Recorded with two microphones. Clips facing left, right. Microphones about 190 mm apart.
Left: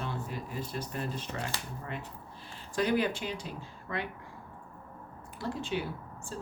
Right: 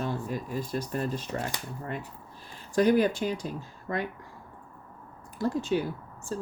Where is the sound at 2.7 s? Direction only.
45° right (ahead or behind).